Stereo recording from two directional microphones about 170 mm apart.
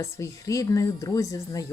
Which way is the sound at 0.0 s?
20° left (ahead or behind).